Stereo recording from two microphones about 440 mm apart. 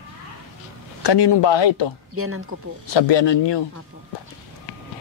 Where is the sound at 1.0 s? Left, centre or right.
Left.